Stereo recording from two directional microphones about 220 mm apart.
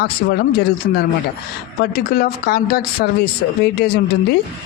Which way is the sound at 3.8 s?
45° left (ahead or behind).